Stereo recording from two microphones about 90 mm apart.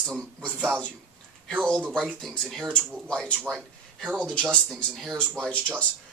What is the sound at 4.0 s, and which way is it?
Speech, 10° right (ahead or behind).